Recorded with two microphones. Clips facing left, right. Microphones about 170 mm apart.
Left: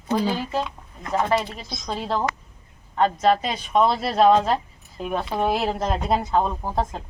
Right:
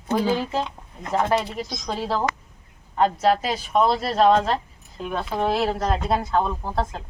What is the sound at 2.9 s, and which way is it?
Speech, 5° right (ahead or behind).